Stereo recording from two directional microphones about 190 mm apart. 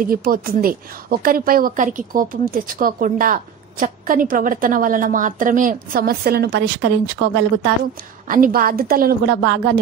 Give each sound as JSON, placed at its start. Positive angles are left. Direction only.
{"t": 0.1, "sound": "speech", "side_deg": -50}
{"t": 8.3, "sound": "speech", "side_deg": -45}
{"t": 9.2, "sound": "speech", "side_deg": -70}